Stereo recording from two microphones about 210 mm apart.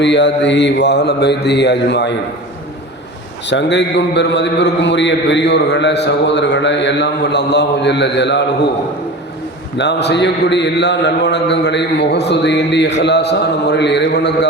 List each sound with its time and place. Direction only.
0.0 s mantra: 55° left (ahead or behind)
3.4 s a man's voice: 60° left (ahead or behind)
9.7 s a man's voice: 55° left (ahead or behind)